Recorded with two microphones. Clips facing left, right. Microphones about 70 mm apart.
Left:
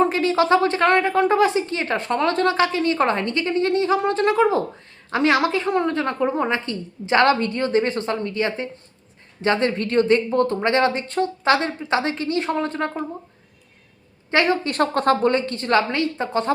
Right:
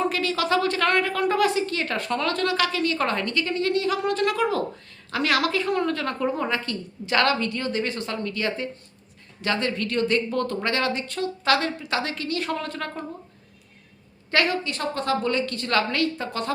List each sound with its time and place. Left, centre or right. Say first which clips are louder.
0.0 s a woman's voice: left 6 dB; left
14.3 s a woman's voice: left 4 dB; left
14.6 s a woman's voice: left 8 dB; left